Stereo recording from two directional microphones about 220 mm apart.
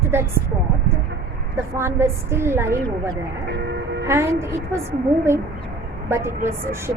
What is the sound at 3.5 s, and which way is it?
Speech, 50° right (ahead or behind).